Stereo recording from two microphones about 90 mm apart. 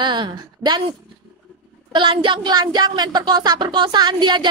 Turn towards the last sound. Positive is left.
turn(degrees=-55)  # may be behind; listen again after turning